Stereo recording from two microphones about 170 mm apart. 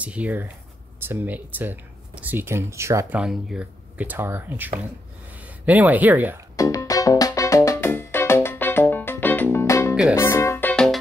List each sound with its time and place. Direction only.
0.0 s speech: 10° right (ahead or behind)
6.5 s music: 20° left (ahead or behind)